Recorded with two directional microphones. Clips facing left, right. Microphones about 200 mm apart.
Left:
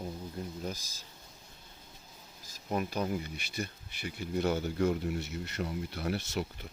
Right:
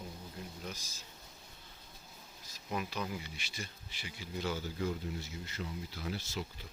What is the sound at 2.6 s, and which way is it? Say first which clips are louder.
Speech: left 6 dB; 45° left (ahead or behind).